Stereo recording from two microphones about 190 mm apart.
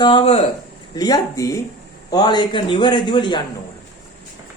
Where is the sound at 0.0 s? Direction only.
25° left (ahead or behind).